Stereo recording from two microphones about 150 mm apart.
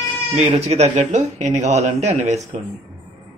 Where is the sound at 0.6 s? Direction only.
45° right (ahead or behind).